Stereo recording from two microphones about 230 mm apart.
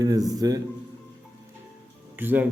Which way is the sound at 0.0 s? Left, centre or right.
Centre.